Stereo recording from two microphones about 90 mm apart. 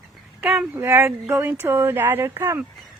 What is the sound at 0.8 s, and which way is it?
Speech, 25° right (ahead or behind).